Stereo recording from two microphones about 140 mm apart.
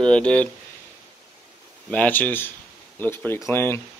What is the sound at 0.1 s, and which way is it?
Speech, 10° left (ahead or behind).